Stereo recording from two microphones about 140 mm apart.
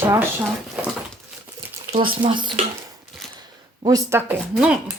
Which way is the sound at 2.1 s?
35° right (ahead or behind).